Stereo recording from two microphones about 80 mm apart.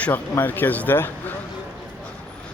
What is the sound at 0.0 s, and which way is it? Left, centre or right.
Speech, left.